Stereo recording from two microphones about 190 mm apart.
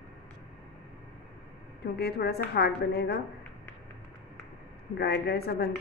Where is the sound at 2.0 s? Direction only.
55° left (ahead or behind).